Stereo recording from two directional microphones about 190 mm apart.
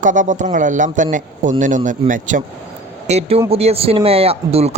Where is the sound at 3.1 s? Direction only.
30° right (ahead or behind).